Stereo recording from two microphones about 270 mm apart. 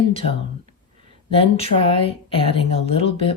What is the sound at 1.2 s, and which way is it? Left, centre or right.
A woman's voice, left.